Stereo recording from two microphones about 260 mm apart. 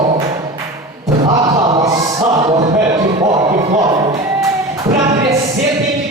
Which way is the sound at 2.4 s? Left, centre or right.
Centre.